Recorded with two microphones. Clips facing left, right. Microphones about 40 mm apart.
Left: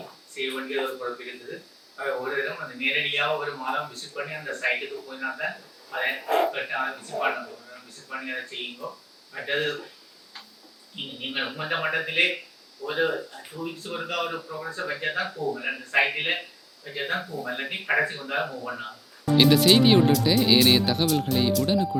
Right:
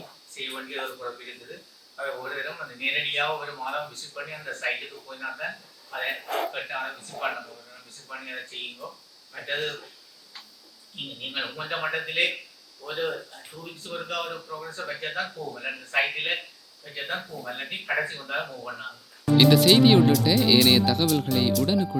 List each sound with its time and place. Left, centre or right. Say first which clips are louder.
0.3 s speech: left 5 dB; centre
11.2 s speech: left 3 dB; centre
14.9 s speech: left 2 dB; centre
19.4 s speech: right 1 dB; centre